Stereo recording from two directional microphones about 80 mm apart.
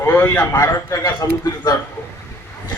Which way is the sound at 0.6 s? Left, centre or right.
Left.